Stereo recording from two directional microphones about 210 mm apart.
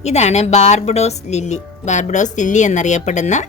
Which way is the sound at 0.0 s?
30° left (ahead or behind).